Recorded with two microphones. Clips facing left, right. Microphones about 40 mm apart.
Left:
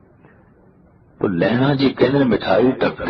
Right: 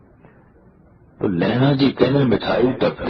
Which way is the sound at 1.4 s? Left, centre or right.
Centre.